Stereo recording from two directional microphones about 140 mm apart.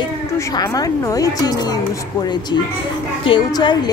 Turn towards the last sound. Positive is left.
turn(degrees=30)  # may be behind; listen again after turning